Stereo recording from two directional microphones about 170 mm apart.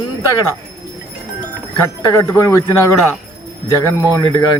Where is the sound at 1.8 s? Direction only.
15° left (ahead or behind).